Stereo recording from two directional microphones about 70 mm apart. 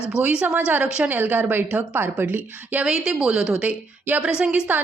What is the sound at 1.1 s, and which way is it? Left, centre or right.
A woman's voice, right.